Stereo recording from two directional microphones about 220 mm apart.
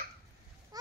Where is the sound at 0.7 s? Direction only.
15° right (ahead or behind).